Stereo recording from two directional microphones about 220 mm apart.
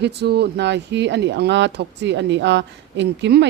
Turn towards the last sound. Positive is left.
turn(degrees=-50)  # may be behind; listen again after turning